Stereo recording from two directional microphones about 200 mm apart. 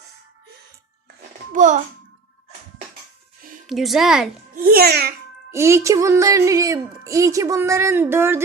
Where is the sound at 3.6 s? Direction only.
Centre (ahead or behind).